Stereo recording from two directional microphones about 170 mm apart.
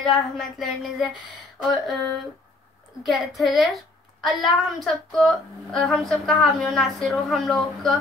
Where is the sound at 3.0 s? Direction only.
Centre (ahead or behind).